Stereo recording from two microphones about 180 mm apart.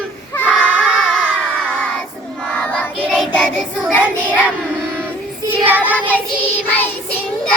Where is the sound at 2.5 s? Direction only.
5° left (ahead or behind).